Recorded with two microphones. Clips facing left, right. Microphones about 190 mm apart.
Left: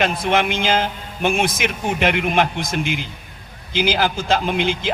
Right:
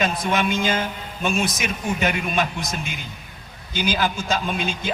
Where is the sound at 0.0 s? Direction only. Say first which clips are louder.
Left 3 dB; 70° left (ahead or behind).